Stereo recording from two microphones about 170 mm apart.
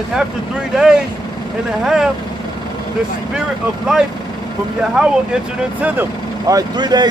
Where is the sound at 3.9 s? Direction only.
5° right (ahead or behind).